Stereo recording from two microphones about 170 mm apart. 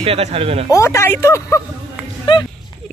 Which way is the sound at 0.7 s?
15° left (ahead or behind).